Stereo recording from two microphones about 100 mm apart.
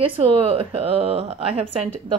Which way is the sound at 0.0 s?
70° right (ahead or behind).